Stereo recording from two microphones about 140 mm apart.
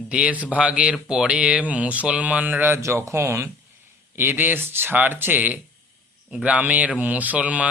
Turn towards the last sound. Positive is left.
turn(degrees=-10)  # may be behind; listen again after turning